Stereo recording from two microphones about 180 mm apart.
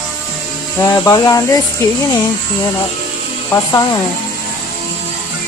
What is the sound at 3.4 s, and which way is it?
Speech, 20° left (ahead or behind).